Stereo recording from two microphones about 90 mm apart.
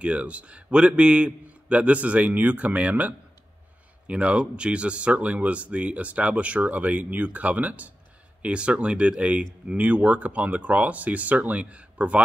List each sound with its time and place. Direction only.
0.0 s speech: 15° right (ahead or behind)